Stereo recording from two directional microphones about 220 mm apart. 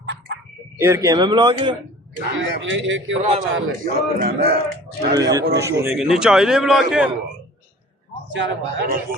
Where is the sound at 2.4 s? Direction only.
60° right (ahead or behind).